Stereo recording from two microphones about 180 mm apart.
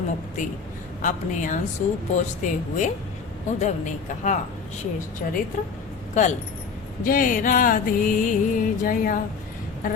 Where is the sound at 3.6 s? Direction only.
40° left (ahead or behind).